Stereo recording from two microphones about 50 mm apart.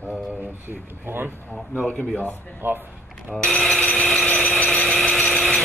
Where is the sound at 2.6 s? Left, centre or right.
Right.